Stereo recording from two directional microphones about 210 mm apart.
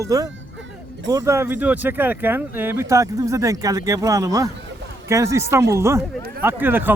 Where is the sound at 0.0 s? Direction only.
15° right (ahead or behind).